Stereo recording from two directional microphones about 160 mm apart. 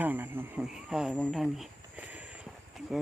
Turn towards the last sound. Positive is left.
turn(degrees=0)  # may be behind; listen again after turning